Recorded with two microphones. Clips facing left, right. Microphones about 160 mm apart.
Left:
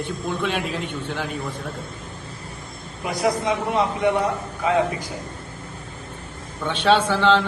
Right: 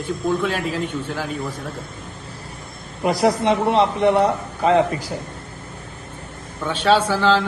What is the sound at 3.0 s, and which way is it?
Speech, 35° right (ahead or behind).